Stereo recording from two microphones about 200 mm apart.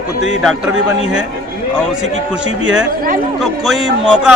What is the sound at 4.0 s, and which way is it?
Speech, 5° right (ahead or behind).